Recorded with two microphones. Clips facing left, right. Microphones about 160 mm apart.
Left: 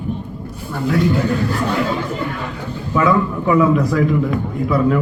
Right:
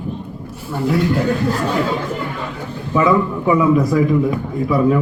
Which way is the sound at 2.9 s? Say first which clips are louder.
Right 1 dB; 15° right (ahead or behind).